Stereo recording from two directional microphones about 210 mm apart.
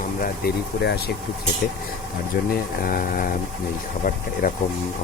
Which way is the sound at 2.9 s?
40° left (ahead or behind).